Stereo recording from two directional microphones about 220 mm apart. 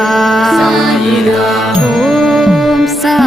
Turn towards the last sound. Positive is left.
turn(degrees=0)  # may be behind; listen again after turning